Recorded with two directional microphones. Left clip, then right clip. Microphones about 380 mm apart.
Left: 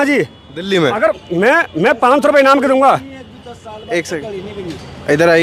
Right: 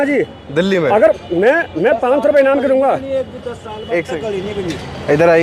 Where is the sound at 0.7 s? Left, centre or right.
Left.